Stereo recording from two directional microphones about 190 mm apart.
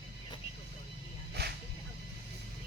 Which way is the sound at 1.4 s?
60° right (ahead or behind).